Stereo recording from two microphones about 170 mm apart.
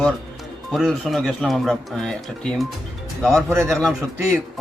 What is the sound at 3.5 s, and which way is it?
Speech, 15° right (ahead or behind).